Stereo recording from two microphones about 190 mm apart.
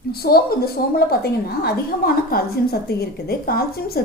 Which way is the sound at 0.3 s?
55° left (ahead or behind).